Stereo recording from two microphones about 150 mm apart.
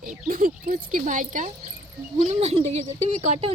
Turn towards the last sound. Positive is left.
turn(degrees=-50)  # may be behind; listen again after turning